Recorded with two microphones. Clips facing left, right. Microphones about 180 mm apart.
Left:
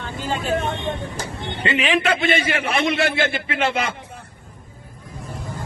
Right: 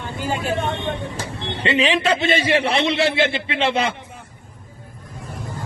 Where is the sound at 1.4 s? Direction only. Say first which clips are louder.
Right 3 dB; 30° right (ahead or behind).